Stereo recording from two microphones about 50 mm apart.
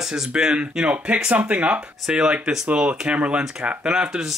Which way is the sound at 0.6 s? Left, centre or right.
Right.